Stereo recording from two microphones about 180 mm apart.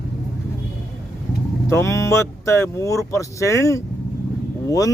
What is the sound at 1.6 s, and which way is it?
Speech, 15° left (ahead or behind).